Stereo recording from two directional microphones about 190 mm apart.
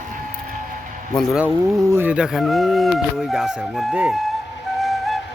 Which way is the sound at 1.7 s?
15° right (ahead or behind).